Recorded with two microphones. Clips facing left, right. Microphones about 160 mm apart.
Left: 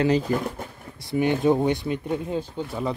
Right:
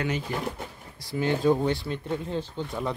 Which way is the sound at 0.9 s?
20° left (ahead or behind).